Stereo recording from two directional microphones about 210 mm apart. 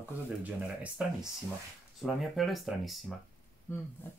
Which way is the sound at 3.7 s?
10° left (ahead or behind).